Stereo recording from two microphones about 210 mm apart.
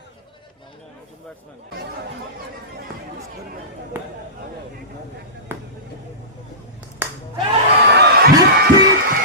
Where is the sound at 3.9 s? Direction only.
10° right (ahead or behind).